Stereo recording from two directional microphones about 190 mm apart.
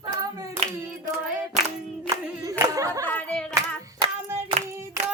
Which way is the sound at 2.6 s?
15° right (ahead or behind).